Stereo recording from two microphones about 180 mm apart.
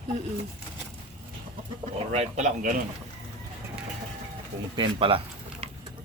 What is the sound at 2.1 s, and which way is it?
Speech, 40° right (ahead or behind).